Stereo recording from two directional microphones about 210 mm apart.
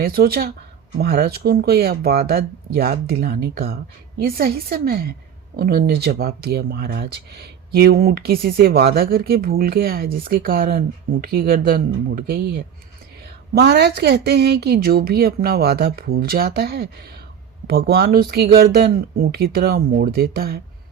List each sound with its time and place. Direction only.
0.0 s a woman's voice: 45° right (ahead or behind)